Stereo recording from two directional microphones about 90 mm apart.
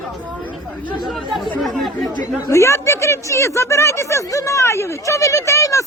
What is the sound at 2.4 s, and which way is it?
Speech, 35° left (ahead or behind).